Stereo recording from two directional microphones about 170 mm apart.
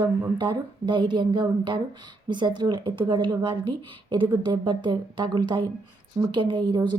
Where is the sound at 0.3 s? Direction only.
25° right (ahead or behind).